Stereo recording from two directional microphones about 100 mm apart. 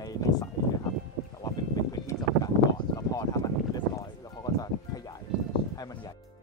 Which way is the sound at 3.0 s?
35° left (ahead or behind).